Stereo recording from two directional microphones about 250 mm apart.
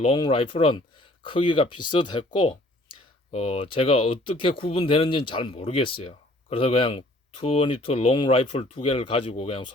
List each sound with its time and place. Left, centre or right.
0.0 s speech: left